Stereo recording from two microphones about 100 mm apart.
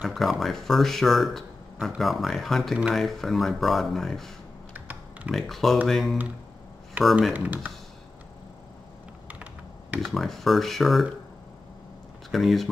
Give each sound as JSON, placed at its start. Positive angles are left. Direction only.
{"t": 0.0, "sound": "speech", "side_deg": 0}
{"t": 4.7, "sound": "typing", "side_deg": -20}
{"t": 5.3, "sound": "speech", "side_deg": 0}
{"t": 7.3, "sound": "speech", "side_deg": -15}
{"t": 9.9, "sound": "speech", "side_deg": 0}
{"t": 12.3, "sound": "speech", "side_deg": 0}